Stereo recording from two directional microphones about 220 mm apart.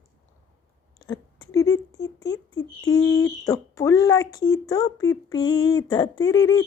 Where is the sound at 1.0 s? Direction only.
15° left (ahead or behind).